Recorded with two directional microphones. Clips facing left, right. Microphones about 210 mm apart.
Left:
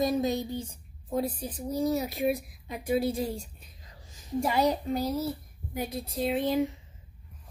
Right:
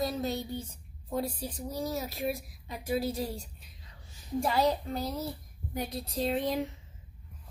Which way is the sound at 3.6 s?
40° left (ahead or behind).